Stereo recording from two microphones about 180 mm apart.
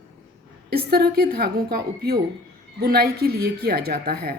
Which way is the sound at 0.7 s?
60° right (ahead or behind).